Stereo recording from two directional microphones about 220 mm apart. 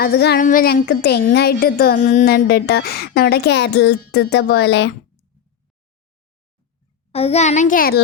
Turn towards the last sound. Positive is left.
turn(degrees=40)  # may be behind; listen again after turning